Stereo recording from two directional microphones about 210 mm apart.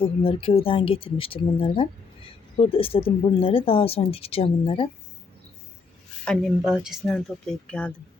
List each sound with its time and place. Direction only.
0.2 s speech: 25° left (ahead or behind)
6.2 s speech: centre (ahead or behind)